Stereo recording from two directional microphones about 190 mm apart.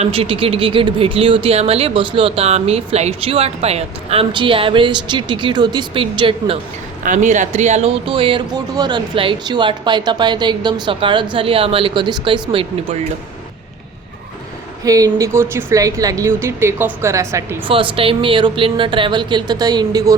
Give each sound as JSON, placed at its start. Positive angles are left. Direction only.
{"t": 0.0, "sound": "speech", "side_deg": -30}
{"t": 7.0, "sound": "speech", "side_deg": -40}
{"t": 14.8, "sound": "speech", "side_deg": -20}
{"t": 17.7, "sound": "speech", "side_deg": -30}